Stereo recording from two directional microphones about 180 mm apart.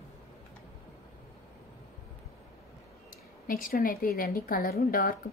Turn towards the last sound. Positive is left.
turn(degrees=55)  # may be behind; listen again after turning